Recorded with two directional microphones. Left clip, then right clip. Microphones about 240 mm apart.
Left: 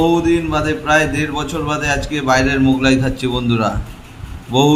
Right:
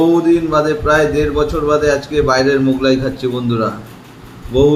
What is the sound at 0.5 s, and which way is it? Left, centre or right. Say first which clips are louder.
A man's voice: right 2 dB; left.